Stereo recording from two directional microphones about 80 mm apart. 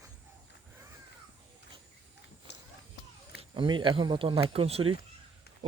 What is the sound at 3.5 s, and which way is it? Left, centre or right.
Speech, right.